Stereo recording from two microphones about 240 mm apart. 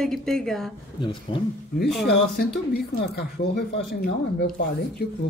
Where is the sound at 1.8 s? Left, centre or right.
Centre.